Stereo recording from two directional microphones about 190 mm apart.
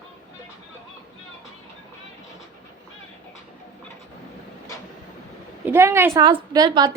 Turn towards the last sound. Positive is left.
turn(degrees=-20)  # may be behind; listen again after turning